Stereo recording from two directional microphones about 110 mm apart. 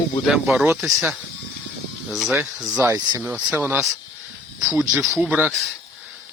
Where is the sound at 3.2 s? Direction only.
10° right (ahead or behind).